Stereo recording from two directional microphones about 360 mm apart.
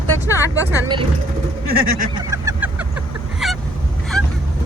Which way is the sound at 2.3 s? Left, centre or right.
Centre.